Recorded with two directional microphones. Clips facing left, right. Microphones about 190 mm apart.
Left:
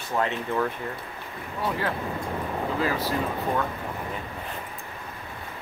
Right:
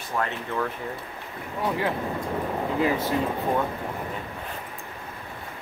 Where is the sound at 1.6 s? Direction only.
15° right (ahead or behind).